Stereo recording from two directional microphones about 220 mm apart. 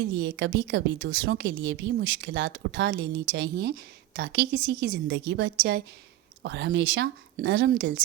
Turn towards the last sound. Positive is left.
turn(degrees=-55)  # may be behind; listen again after turning